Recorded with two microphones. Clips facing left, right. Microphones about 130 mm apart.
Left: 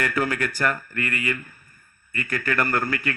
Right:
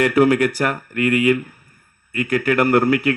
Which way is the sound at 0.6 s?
15° right (ahead or behind).